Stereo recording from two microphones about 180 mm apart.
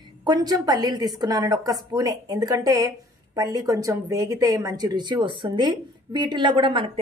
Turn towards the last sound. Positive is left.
turn(degrees=-30)  # may be behind; listen again after turning